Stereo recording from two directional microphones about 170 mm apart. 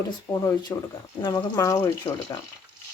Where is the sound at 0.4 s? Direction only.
20° left (ahead or behind).